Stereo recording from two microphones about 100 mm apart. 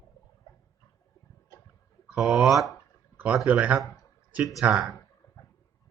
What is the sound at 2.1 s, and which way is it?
Speech, 5° right (ahead or behind).